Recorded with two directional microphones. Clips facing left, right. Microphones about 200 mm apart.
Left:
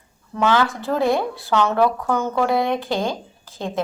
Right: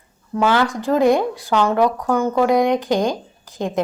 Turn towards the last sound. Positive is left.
turn(degrees=-15)  # may be behind; listen again after turning